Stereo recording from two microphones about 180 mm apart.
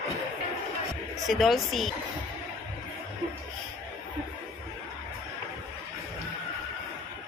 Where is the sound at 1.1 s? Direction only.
Centre (ahead or behind).